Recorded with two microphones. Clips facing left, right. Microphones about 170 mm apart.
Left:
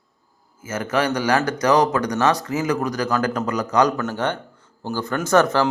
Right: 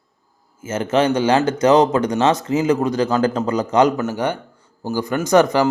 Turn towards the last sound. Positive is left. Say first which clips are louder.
# right 3 dB
turn(degrees=-15)  # may be behind; listen again after turning